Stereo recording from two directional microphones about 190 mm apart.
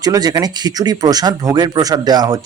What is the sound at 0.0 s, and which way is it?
Speech, 20° right (ahead or behind).